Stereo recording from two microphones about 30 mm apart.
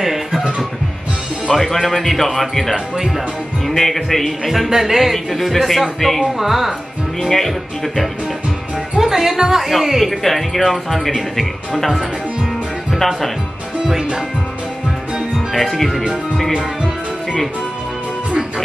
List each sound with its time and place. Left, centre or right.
0.0 s music: centre
1.5 s speech: centre
4.5 s a man's voice: centre
5.1 s speech: centre
6.2 s a man's voice: centre
7.2 s speech: centre
8.9 s speech: centre
13.8 s a man's voice: centre
15.3 s speech: centre